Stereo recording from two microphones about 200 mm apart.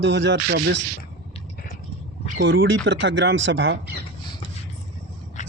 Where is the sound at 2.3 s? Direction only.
75° right (ahead or behind).